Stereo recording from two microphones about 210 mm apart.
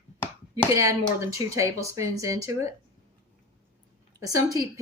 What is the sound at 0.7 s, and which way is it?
Speech, 15° right (ahead or behind).